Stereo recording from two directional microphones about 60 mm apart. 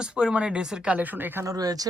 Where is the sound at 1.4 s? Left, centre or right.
Right.